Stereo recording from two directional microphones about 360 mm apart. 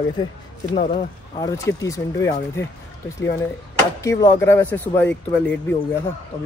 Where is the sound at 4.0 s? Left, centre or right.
Centre.